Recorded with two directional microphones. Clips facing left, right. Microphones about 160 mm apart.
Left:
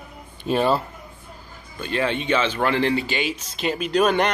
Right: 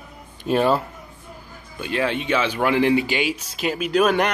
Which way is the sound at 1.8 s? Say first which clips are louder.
Even; 5° right (ahead or behind).